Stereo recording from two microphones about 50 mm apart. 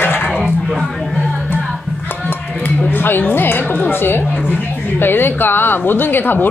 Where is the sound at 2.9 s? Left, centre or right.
Left.